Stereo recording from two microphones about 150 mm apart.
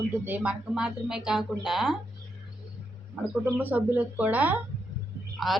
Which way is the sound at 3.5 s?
10° right (ahead or behind).